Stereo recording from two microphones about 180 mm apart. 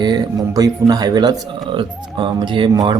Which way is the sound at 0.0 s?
20° right (ahead or behind).